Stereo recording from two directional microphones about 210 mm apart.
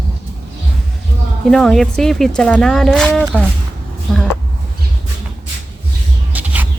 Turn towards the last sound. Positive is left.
turn(degrees=-5)  # may be behind; listen again after turning